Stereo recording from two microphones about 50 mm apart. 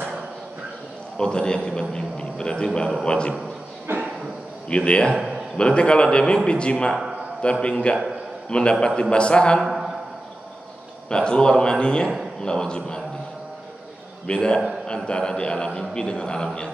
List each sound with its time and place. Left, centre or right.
1.1 s a man's voice: centre
3.9 s speech: right
4.6 s a man's voice: left
9.6 s a sound: centre
11.1 s a man's voice: centre
14.2 s a man's voice: centre